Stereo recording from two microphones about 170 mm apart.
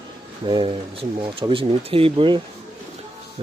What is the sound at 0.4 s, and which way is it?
Speech, 30° right (ahead or behind).